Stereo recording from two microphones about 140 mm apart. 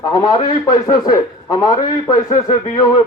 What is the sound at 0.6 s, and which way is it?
Speech, 25° left (ahead or behind).